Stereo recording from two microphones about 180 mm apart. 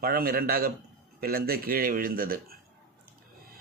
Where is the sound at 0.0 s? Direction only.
55° right (ahead or behind).